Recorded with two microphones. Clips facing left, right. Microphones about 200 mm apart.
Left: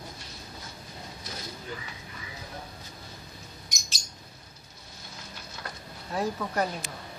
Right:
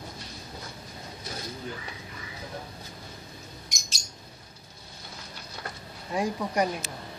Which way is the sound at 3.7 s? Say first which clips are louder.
Right 1 dB; centre (ahead or behind).